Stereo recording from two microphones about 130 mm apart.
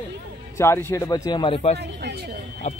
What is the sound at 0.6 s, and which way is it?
A man's voice, 20° left (ahead or behind).